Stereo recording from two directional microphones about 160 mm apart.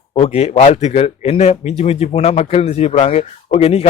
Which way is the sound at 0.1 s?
40° left (ahead or behind).